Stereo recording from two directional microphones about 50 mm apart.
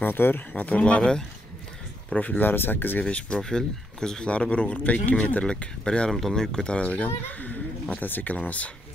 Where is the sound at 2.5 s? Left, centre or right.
Left.